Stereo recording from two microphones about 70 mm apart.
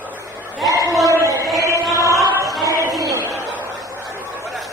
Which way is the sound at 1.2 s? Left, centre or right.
Right.